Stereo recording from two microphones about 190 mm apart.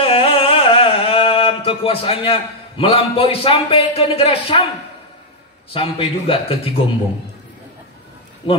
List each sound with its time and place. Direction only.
0.0 s a sound: 30° left (ahead or behind)
5.7 s a man's voice: 30° left (ahead or behind)
8.4 s a man's voice: 25° left (ahead or behind)